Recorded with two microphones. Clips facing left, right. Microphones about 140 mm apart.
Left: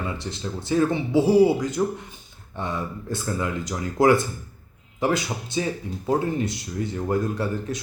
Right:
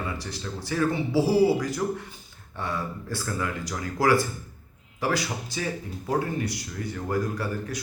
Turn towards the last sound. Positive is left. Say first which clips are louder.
# left 4 dB
turn(degrees=25)  # may be behind; listen again after turning